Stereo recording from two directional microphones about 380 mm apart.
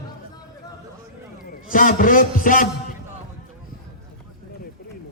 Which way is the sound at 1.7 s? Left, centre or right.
Left.